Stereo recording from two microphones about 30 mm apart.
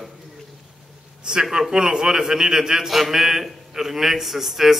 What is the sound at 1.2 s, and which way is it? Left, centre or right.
A man's voice, right.